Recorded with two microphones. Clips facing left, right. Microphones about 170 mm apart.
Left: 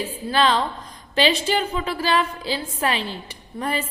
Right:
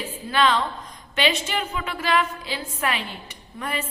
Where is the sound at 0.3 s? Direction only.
35° left (ahead or behind).